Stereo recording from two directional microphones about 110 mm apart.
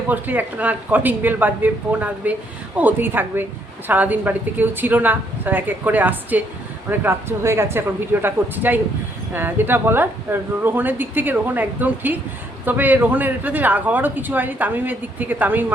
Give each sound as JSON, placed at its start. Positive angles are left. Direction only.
{"t": 0.1, "sound": "speech", "side_deg": -15}